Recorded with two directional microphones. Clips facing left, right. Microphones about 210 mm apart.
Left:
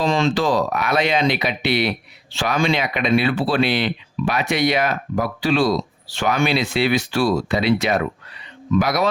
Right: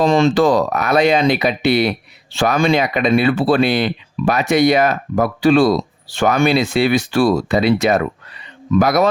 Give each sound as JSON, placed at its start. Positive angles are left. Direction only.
{"t": 0.0, "sound": "speech", "side_deg": -45}